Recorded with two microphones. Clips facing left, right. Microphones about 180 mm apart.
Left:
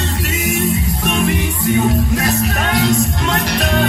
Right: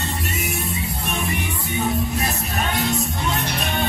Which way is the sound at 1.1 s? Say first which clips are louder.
Left 9 dB; 90° left.